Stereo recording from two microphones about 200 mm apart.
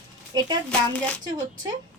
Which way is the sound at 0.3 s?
20° right (ahead or behind).